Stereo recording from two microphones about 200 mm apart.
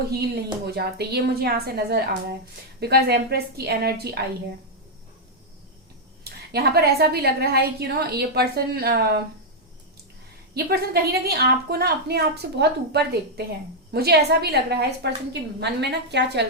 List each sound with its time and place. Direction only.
0.6 s a woman's voice: 55° right (ahead or behind)
6.2 s a woman's voice: 50° right (ahead or behind)
10.5 s a woman's voice: 50° right (ahead or behind)